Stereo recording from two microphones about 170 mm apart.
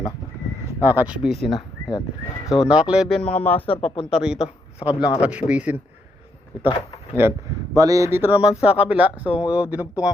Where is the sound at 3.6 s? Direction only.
35° left (ahead or behind).